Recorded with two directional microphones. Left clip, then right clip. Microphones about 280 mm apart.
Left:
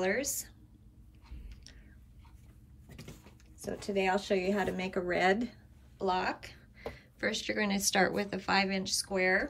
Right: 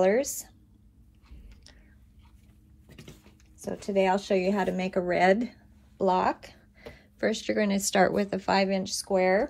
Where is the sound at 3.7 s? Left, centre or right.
Centre.